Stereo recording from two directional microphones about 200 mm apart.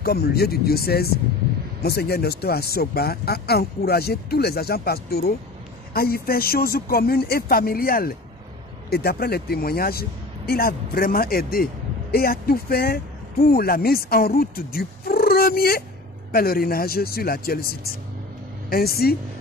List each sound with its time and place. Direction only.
0.0 s speech: 50° left (ahead or behind)